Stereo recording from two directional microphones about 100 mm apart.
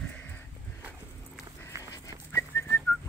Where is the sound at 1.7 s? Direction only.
30° right (ahead or behind).